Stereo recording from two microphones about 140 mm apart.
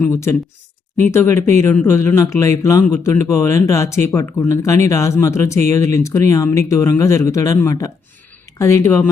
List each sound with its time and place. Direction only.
0.0 s speech: 20° left (ahead or behind)